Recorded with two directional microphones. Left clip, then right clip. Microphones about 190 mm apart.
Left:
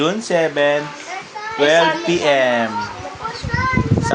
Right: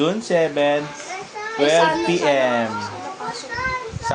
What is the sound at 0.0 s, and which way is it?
Speech, 15° left (ahead or behind).